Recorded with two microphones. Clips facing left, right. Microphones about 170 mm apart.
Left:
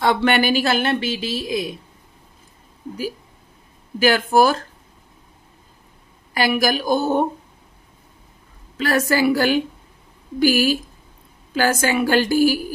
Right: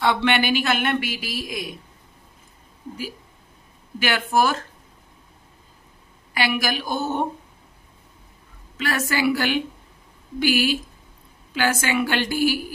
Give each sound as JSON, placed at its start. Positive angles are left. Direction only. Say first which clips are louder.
{"t": 0.0, "sound": "a woman's voice", "louder": "left 3 dB", "side_deg": 40}
{"t": 4.0, "sound": "a woman's voice", "louder": "left 6 dB", "side_deg": 40}
{"t": 6.3, "sound": "a woman's voice", "louder": "left 5 dB", "side_deg": 40}
{"t": 8.7, "sound": "a woman's voice", "louder": "left 6 dB", "side_deg": 40}